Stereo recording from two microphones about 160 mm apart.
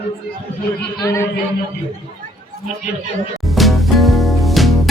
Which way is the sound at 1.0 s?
20° left (ahead or behind).